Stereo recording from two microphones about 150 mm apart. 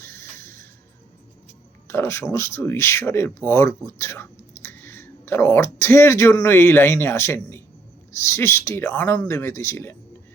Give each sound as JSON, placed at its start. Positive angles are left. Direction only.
{"t": 0.0, "sound": "music", "side_deg": 15}
{"t": 1.9, "sound": "speech", "side_deg": 15}